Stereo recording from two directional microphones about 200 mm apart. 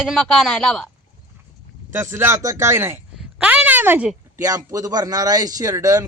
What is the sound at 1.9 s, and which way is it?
A woman's voice, 15° right (ahead or behind).